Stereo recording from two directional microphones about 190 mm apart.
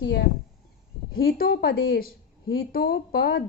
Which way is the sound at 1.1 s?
50° left (ahead or behind).